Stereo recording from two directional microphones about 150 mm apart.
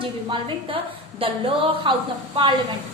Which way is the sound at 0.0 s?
35° right (ahead or behind).